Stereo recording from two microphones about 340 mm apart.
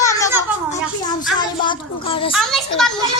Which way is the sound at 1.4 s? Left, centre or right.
Centre.